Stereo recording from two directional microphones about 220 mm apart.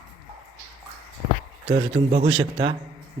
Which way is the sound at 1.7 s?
30° right (ahead or behind).